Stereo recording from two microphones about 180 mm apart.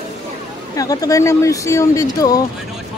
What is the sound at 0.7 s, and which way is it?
Speech, 20° left (ahead or behind).